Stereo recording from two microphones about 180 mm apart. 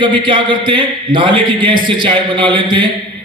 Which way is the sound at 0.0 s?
25° right (ahead or behind).